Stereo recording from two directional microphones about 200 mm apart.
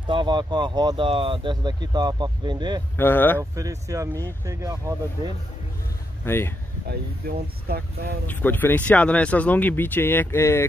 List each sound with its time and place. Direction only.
0.0 s speech: 25° right (ahead or behind)
3.0 s speech: 10° left (ahead or behind)
3.3 s speech: 15° right (ahead or behind)
6.2 s speech: 10° left (ahead or behind)
6.9 s speech: 50° right (ahead or behind)
8.3 s speech: 10° left (ahead or behind)